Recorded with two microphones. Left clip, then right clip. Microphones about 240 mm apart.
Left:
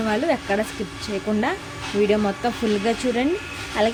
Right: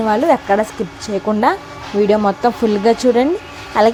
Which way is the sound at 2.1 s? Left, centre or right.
Right.